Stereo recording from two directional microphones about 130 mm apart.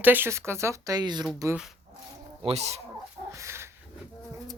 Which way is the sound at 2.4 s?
55° right (ahead or behind).